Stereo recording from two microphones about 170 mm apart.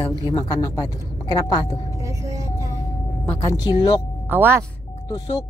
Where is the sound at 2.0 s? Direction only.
20° right (ahead or behind).